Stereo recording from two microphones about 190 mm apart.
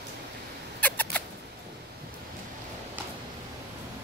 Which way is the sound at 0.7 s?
10° left (ahead or behind).